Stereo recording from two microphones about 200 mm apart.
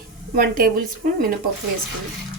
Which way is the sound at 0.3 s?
45° right (ahead or behind).